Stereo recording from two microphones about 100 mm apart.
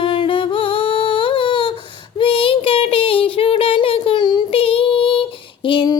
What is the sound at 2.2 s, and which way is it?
Child singing, 65° left (ahead or behind).